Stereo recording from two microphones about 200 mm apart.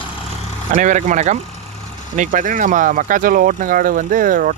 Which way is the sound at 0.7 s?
40° right (ahead or behind).